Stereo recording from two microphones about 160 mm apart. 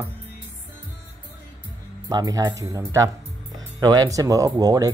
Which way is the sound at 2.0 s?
20° right (ahead or behind).